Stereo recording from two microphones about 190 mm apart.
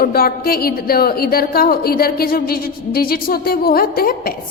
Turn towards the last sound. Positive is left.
turn(degrees=50)  # may be behind; listen again after turning